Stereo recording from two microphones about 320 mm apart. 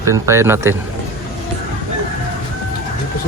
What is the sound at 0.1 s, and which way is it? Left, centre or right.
Speech, centre.